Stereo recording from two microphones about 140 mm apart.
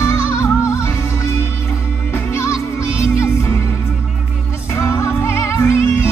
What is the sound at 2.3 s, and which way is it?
Music, 20° left (ahead or behind).